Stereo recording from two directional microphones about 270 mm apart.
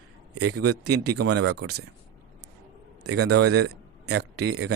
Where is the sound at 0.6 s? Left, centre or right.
Right.